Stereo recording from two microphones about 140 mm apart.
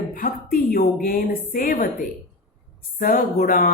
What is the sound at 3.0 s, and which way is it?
Speech, 90° left.